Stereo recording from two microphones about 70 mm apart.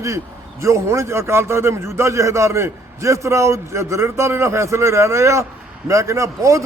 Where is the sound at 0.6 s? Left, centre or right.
Right.